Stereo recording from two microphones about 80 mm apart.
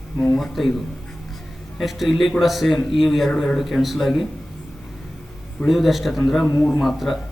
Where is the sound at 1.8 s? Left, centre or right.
Centre.